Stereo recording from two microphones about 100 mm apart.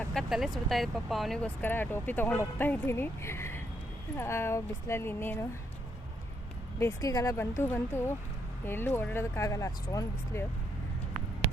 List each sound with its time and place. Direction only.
0.1 s speech: centre (ahead or behind)
1.4 s speech: 20° left (ahead or behind)
6.7 s speech: 25° left (ahead or behind)
7.1 s speech: 40° left (ahead or behind)
7.3 s speech: 25° left (ahead or behind)